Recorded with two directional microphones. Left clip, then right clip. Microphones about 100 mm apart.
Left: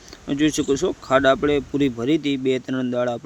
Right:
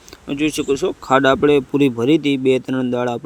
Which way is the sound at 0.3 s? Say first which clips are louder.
Right 1 dB; 25° right (ahead or behind).